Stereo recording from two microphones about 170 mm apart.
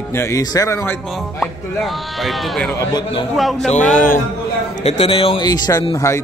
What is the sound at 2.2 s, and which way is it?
Speech, centre (ahead or behind).